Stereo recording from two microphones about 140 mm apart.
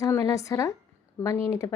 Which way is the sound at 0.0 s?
25° left (ahead or behind).